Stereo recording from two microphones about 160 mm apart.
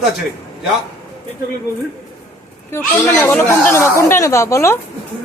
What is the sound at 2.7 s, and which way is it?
A woman's voice, 15° left (ahead or behind).